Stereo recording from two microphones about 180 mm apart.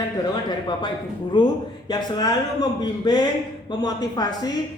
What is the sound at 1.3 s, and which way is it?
A man's voice, 25° left (ahead or behind).